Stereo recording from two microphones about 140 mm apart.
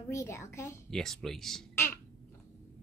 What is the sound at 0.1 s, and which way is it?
Speech, 20° left (ahead or behind).